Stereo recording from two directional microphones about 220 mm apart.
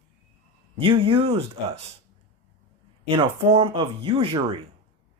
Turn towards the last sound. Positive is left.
turn(degrees=-25)  # may be behind; listen again after turning